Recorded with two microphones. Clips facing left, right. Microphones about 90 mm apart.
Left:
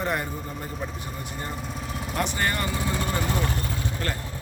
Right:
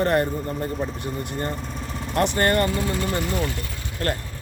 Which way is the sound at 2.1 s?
55° right (ahead or behind).